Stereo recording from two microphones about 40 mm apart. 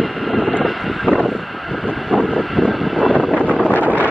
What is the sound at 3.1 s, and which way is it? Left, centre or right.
Wind noise, left.